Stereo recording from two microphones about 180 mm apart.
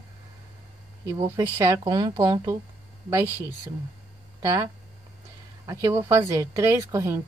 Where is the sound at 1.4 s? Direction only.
15° right (ahead or behind).